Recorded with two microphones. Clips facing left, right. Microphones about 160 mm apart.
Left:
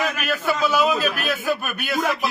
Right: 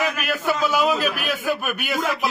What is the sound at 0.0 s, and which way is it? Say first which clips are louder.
A man's voice: even; 10° right (ahead or behind).